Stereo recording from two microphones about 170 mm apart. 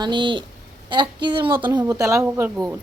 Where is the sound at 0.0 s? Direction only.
30° right (ahead or behind).